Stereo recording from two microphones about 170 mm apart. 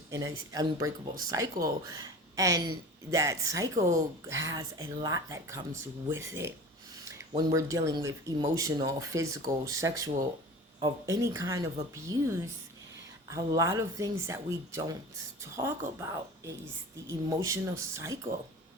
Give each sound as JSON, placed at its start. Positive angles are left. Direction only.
{"t": 0.1, "sound": "speech", "side_deg": -20}
{"t": 16.0, "sound": "speech", "side_deg": -20}